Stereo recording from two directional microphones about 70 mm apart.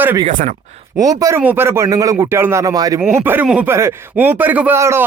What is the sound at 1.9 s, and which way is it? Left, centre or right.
Speech, right.